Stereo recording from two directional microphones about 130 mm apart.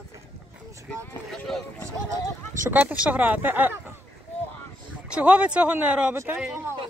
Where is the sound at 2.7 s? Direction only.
10° right (ahead or behind).